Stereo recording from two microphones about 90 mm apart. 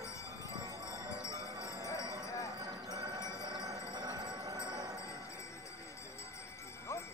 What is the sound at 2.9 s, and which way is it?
Music, 45° right (ahead or behind).